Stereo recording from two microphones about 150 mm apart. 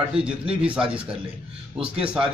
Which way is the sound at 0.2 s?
5° right (ahead or behind).